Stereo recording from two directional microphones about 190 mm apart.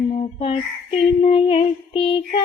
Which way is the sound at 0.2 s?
30° left (ahead or behind).